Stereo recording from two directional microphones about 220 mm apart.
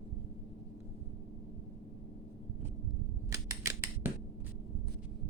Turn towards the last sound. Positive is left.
turn(degrees=-10)  # may be behind; listen again after turning